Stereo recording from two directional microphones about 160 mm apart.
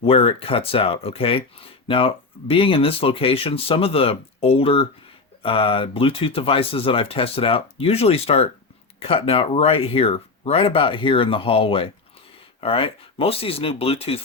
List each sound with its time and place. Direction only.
0.0 s speech: 35° left (ahead or behind)